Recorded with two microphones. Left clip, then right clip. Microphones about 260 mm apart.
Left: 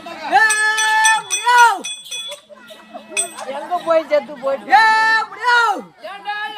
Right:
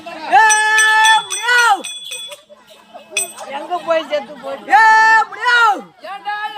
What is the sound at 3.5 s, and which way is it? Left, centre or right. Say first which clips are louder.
Speech: left 1 dB; left.